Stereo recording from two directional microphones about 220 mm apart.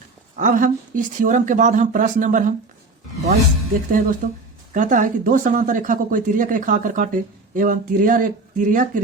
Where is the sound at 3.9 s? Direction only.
40° right (ahead or behind).